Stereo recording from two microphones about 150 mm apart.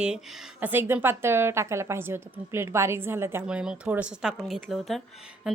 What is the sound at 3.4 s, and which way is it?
Speech, 5° right (ahead or behind).